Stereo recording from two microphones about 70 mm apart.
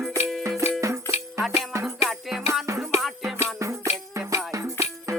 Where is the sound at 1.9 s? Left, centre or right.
Centre.